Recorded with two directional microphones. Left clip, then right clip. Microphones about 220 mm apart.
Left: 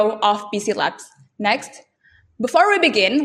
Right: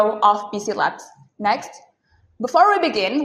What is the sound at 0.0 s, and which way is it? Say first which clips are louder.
Speech: right 1 dB; 35° left (ahead or behind).